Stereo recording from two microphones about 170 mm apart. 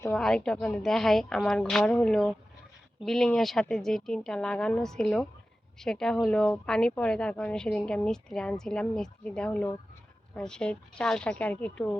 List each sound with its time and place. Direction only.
0.2 s a woman's voice: 5° left (ahead or behind)